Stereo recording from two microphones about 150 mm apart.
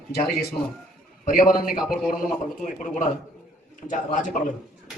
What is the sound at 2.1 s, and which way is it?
A man's voice, 60° left (ahead or behind).